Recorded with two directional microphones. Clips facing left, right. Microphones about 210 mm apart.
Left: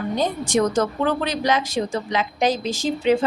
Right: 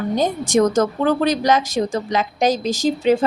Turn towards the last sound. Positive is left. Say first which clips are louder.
# right 3 dB
turn(degrees=-40)  # may be behind; listen again after turning